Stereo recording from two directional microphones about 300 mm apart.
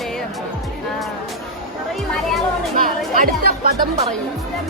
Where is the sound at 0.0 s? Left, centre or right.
Centre.